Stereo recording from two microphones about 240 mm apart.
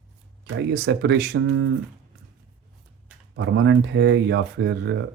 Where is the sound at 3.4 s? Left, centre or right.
Right.